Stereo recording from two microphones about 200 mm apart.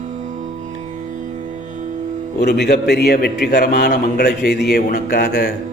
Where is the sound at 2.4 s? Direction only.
55° left (ahead or behind).